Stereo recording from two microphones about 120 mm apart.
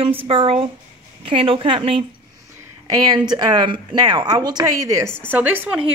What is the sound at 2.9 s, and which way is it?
Speech, 30° right (ahead or behind).